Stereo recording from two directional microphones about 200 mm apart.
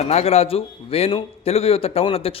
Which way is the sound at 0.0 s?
30° left (ahead or behind).